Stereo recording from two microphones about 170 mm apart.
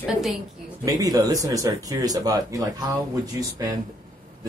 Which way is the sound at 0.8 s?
20° right (ahead or behind).